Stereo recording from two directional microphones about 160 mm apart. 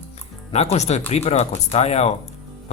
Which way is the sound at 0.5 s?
40° left (ahead or behind).